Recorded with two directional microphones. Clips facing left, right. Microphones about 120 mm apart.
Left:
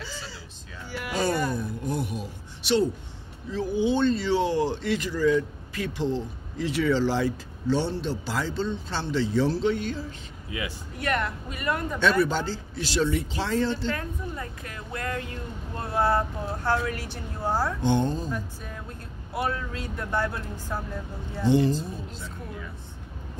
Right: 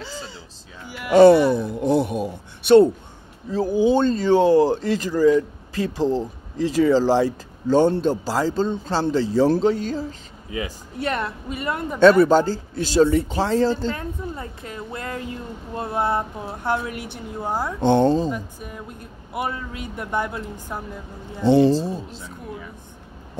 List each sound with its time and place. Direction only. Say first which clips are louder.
1.1 s a sound: right 15 dB; 75° right (ahead or behind); by 2.9 s 55° right (ahead or behind)
3.4 s speech: right 6 dB; 40° right (ahead or behind); by 12.0 s 25° right (ahead or behind)
12.0 s speech: right 12 dB; 45° right (ahead or behind)
13.9 s speech: right 3 dB; 25° right (ahead or behind)
17.8 s speech: right 12 dB; 70° right (ahead or behind)
18.3 s speech: right 3 dB; 10° right (ahead or behind)
21.5 s speech: right 7 dB; 85° right